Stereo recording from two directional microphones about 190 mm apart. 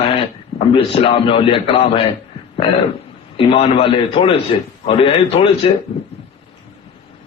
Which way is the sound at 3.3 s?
30° left (ahead or behind).